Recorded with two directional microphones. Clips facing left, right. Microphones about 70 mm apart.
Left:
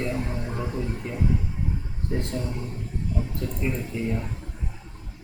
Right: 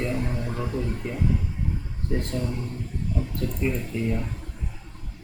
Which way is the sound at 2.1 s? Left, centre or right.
Centre.